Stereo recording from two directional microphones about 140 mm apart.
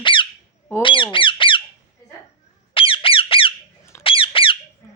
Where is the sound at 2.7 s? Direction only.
40° left (ahead or behind).